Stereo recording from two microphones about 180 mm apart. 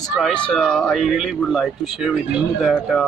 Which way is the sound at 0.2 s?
5° left (ahead or behind).